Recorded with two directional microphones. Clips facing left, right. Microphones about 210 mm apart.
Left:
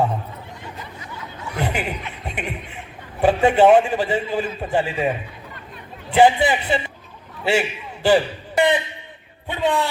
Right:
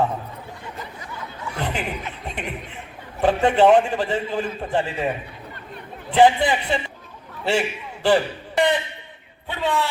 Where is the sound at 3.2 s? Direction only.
10° left (ahead or behind).